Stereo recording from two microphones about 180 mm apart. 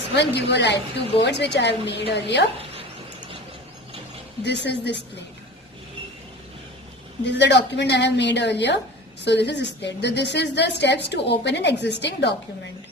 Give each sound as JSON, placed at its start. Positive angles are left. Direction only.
{"t": 0.2, "sound": "a woman's voice", "side_deg": 70}
{"t": 4.4, "sound": "a woman's voice", "side_deg": 75}
{"t": 7.3, "sound": "a woman's voice", "side_deg": 75}